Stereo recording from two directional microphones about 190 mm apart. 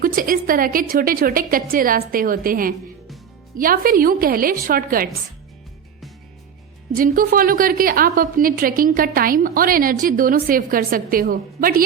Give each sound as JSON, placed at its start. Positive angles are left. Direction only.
{"t": 0.0, "sound": "a woman's voice", "side_deg": -50}
{"t": 6.9, "sound": "a woman's voice", "side_deg": -50}